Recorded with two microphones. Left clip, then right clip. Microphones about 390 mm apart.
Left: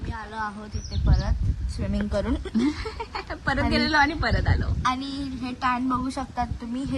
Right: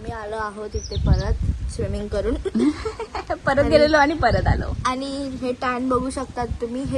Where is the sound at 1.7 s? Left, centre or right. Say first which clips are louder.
Right 3 dB; centre.